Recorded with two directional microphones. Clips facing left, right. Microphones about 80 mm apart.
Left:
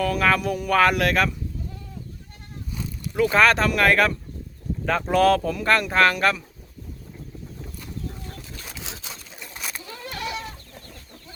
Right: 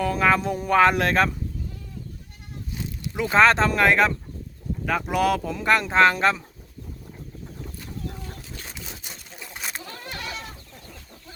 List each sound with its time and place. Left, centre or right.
0.0 s speech: right
3.2 s speech: right
4.9 s speech: centre; by 6.4 s right
8.9 s a sound: left
10.3 s chicken: centre